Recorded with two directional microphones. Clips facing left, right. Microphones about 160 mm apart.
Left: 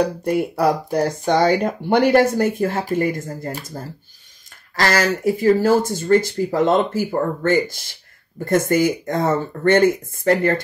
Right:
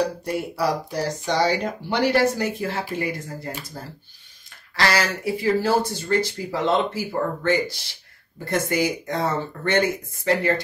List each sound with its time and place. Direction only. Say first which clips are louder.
0.0 s speech: left 5 dB; 55° left (ahead or behind)